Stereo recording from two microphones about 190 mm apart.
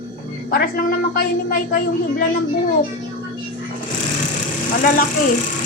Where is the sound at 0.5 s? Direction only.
50° left (ahead or behind).